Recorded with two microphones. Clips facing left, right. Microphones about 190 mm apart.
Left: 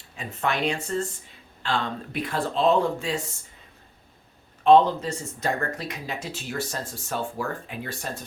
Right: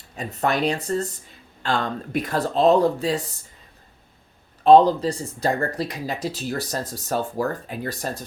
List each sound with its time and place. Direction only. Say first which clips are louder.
0.2 s speech: right 4 dB; 40° right (ahead or behind)
4.6 s speech: right 4 dB; 35° right (ahead or behind)